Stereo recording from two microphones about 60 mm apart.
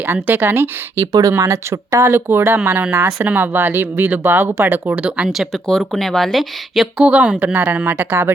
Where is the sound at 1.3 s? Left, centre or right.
Right.